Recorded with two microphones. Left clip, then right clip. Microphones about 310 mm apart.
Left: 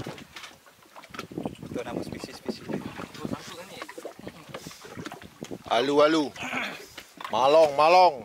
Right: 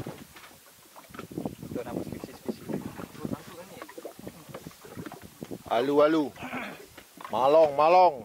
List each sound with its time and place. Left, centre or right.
1.8 s boat: centre
3.4 s a sound: centre
4.5 s boat: centre
5.7 s speech: centre
6.4 s a sound: centre
7.2 s speech: centre